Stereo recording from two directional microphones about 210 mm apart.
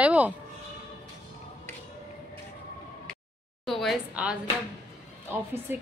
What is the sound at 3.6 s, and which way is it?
Speech, centre (ahead or behind).